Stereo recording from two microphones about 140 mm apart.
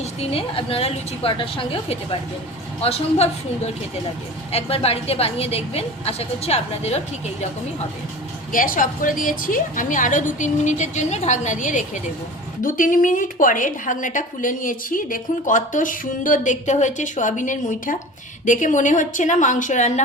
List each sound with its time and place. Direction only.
0.0 s a woman's voice: 45° left (ahead or behind)
4.5 s a woman's voice: 45° left (ahead or behind)
8.5 s a woman's voice: 80° left; by 11.9 s 65° left (ahead or behind)
12.6 s a woman's voice: 75° left (ahead or behind); by 19.9 s 60° left (ahead or behind)